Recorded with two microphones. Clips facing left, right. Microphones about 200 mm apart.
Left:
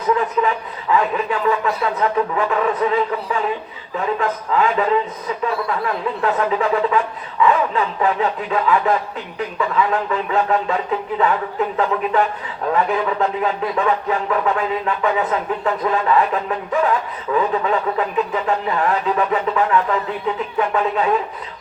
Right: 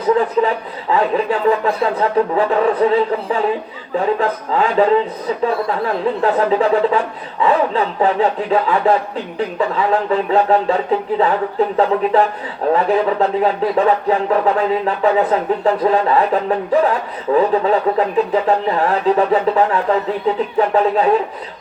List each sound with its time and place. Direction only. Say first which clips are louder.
0.0 s speech: right 4 dB; 35° right (ahead or behind)